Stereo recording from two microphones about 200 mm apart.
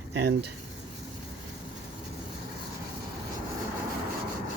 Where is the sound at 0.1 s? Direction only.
60° right (ahead or behind).